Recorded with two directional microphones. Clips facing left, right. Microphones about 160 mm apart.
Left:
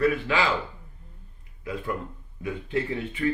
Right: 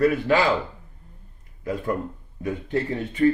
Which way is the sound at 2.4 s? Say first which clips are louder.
Right 3 dB; 40° right (ahead or behind).